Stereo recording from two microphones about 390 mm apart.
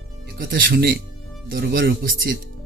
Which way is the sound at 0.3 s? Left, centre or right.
Right.